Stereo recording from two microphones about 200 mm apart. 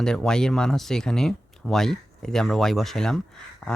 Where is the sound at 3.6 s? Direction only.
Centre (ahead or behind).